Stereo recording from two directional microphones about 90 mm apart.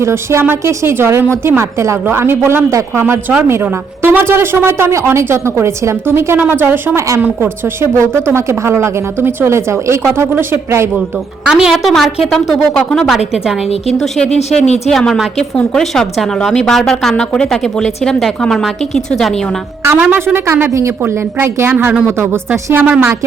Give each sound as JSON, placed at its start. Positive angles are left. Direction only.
{"t": 0.0, "sound": "a woman's voice", "side_deg": -30}
{"t": 11.4, "sound": "a woman's voice", "side_deg": -5}
{"t": 14.8, "sound": "a woman's voice", "side_deg": 5}
{"t": 19.8, "sound": "a woman's voice", "side_deg": -20}